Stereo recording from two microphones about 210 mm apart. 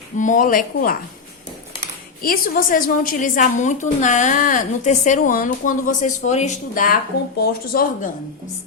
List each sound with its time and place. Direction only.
0.2 s a woman's voice: 40° left (ahead or behind)
2.2 s a woman's voice: 45° left (ahead or behind)
7.1 s speech: 50° left (ahead or behind)